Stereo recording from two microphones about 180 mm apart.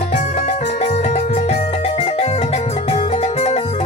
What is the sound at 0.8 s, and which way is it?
Music, 40° left (ahead or behind).